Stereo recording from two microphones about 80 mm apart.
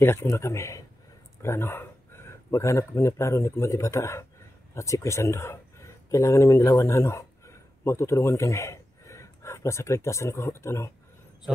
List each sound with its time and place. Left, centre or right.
0.0 s a man's voice: left